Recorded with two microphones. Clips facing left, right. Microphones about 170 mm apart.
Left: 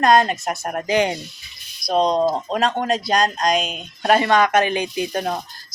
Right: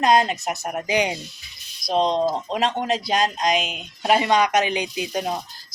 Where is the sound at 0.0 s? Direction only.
50° left (ahead or behind).